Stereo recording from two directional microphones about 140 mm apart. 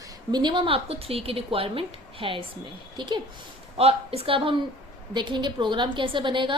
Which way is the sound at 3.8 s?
45° right (ahead or behind).